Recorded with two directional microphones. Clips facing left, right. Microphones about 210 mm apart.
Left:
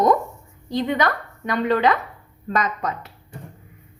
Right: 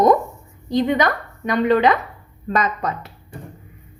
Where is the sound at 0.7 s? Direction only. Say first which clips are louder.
Right 4 dB; 20° right (ahead or behind).